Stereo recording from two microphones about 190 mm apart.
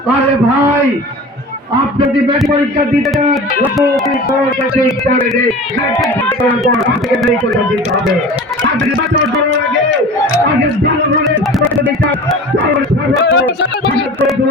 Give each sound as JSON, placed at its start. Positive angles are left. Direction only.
{"t": 3.6, "sound": "speech", "side_deg": 0}
{"t": 6.0, "sound": "speech", "side_deg": 5}
{"t": 13.2, "sound": "speech", "side_deg": 60}